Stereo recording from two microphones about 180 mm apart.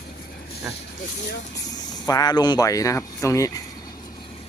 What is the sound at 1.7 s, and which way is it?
Speech, 20° left (ahead or behind).